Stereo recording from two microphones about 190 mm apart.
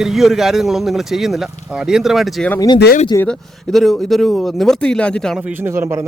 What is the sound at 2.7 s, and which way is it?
Speech, 60° left (ahead or behind).